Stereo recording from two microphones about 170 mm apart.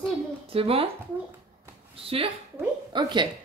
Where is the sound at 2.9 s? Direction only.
25° right (ahead or behind).